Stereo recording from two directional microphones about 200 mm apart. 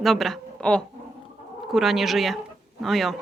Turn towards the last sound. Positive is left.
turn(degrees=0)  # may be behind; listen again after turning